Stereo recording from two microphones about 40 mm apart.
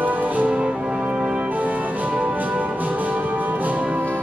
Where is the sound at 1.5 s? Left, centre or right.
Right.